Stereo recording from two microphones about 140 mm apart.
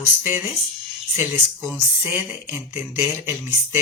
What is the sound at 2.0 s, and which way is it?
Speech, 15° right (ahead or behind).